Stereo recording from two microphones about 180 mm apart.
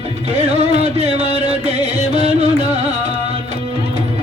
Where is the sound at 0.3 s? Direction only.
35° right (ahead or behind).